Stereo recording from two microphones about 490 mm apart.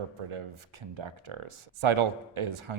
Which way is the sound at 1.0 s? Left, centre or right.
Right.